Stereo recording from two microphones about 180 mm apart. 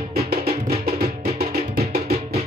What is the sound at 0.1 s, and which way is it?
Music, 60° right (ahead or behind).